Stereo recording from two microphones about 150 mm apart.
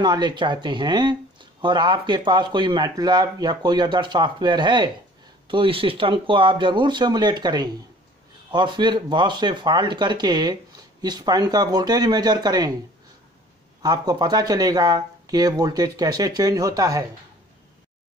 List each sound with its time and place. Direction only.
0.0 s speech: 30° right (ahead or behind)
13.8 s speech: 25° right (ahead or behind)